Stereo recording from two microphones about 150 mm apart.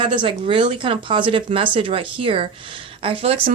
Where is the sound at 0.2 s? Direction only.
35° right (ahead or behind).